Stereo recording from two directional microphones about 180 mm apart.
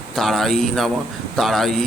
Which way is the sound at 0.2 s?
Centre (ahead or behind).